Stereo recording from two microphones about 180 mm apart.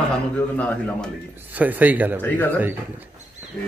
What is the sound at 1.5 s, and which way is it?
Speech, 10° right (ahead or behind).